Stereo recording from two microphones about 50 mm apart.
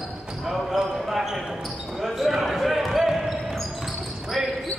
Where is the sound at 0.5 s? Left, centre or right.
Centre.